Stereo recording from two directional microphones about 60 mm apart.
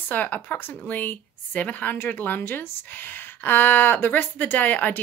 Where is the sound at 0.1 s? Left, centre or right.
Left.